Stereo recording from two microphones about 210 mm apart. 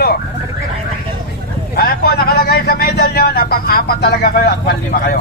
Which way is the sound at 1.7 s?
45° left (ahead or behind).